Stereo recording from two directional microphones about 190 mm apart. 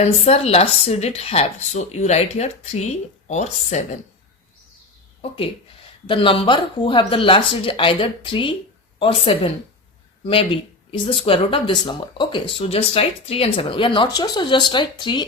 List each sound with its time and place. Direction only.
0.0 s speech: 35° left (ahead or behind)
6.1 s speech: 25° left (ahead or behind)